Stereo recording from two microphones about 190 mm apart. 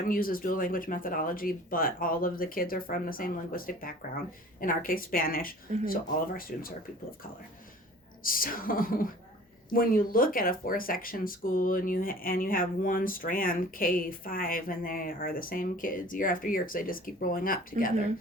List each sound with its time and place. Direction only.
0.1 s speech: 50° left (ahead or behind)
8.2 s speech: 50° left (ahead or behind)